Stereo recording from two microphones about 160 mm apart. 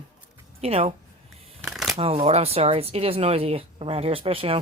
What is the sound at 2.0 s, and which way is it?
A woman's voice, 40° right (ahead or behind).